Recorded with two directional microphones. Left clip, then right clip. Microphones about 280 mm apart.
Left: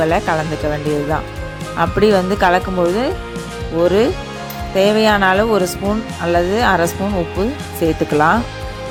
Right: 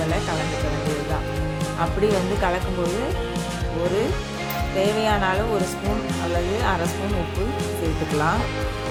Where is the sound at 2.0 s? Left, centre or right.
Left.